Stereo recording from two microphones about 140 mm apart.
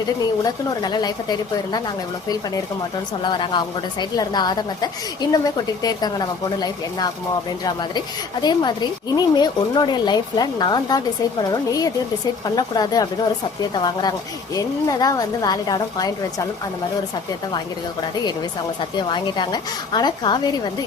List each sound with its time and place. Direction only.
0.2 s a woman's voice: 30° left (ahead or behind)
3.2 s a woman's voice: 35° left (ahead or behind)
18.9 s a woman's voice: 35° left (ahead or behind)